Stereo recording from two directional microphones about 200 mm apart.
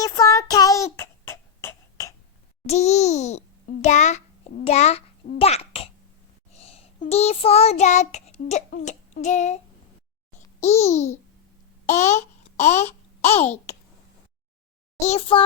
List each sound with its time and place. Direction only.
0.0 s child singing: 15° left (ahead or behind)
2.6 s a child's voice: 35° left (ahead or behind)
6.5 s child singing: 30° left (ahead or behind)
10.6 s a child's voice: 35° left (ahead or behind)
15.0 s a child's voice: 35° left (ahead or behind)